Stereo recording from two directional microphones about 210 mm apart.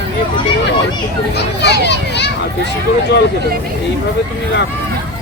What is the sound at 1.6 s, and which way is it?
Speech, 55° left (ahead or behind).